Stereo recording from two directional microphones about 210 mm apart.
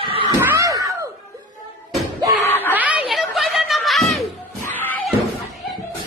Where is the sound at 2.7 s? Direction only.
5° right (ahead or behind).